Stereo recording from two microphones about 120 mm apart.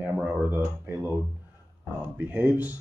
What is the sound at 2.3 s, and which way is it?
Speech, 15° right (ahead or behind).